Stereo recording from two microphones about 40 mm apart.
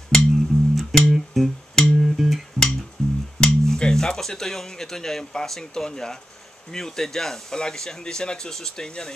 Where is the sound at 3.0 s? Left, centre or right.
Left.